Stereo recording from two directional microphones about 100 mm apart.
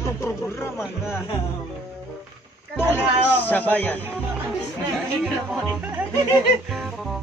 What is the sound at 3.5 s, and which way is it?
Speech, 20° left (ahead or behind).